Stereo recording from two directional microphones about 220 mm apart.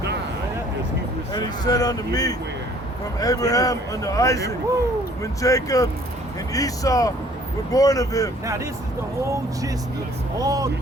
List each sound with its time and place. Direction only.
1.3 s speech: 15° left (ahead or behind)
10.3 s speech: 15° right (ahead or behind)